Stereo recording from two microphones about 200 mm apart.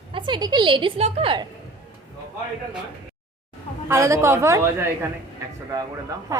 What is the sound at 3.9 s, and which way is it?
Speech, 15° right (ahead or behind).